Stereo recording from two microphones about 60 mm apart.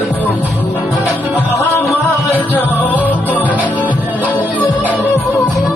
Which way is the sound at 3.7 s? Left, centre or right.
Right.